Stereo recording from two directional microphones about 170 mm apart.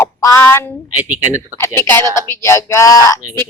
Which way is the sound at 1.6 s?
15° left (ahead or behind).